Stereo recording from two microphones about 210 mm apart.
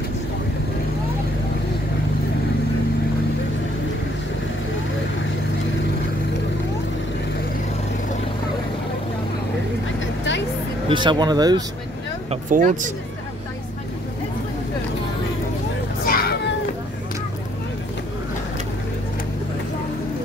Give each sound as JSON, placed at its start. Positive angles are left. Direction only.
{"t": 9.9, "sound": "vehicle", "side_deg": 60}
{"t": 10.9, "sound": "speech", "side_deg": -20}
{"t": 12.3, "sound": "speech", "side_deg": -40}
{"t": 16.1, "sound": "children playing", "side_deg": 45}